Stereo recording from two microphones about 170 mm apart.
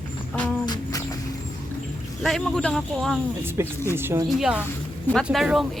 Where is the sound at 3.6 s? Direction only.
15° right (ahead or behind).